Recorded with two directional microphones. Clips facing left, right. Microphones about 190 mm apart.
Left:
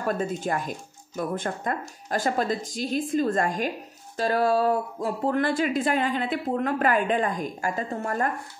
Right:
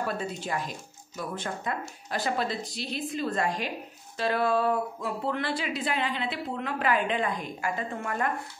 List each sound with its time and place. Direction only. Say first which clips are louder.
0.0 s speech: left 5 dB; 50° left (ahead or behind)